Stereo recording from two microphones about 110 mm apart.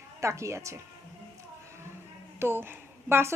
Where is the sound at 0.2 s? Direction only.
25° right (ahead or behind).